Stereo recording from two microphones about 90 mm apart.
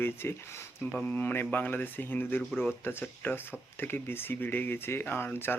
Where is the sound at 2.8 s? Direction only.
20° left (ahead or behind).